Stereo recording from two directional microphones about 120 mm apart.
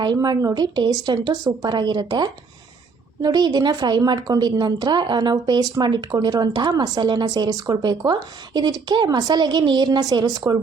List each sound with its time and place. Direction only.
0.0 s a woman's voice: 35° right (ahead or behind)